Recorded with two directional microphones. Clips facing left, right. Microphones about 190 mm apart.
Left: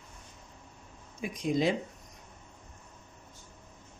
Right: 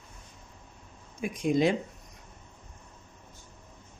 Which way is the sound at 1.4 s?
55° right (ahead or behind).